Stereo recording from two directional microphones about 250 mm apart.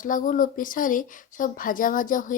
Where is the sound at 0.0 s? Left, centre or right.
Left.